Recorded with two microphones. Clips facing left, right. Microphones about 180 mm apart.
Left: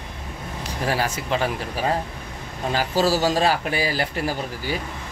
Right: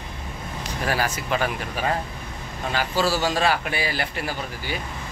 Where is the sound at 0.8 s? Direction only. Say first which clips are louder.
Left 1 dB; 25° left (ahead or behind).